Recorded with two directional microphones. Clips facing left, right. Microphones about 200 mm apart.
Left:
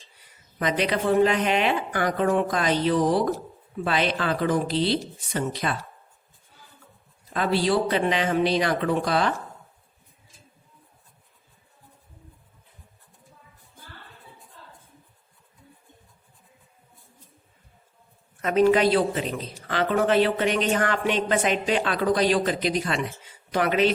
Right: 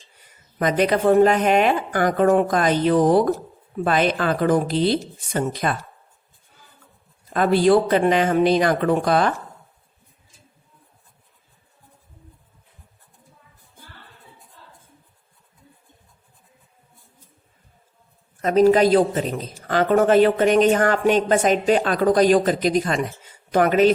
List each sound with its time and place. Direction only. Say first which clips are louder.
0.6 s a man's voice: right 6 dB; 45° right (ahead or behind)
7.3 s a man's voice: right 7 dB; 50° right (ahead or behind)
18.4 s a man's voice: right 4 dB; 40° right (ahead or behind)